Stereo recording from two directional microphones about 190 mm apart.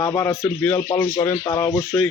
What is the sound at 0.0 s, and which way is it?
Speech, 15° left (ahead or behind).